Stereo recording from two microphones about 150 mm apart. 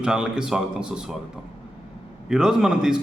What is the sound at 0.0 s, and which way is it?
A man's voice, 5° right (ahead or behind).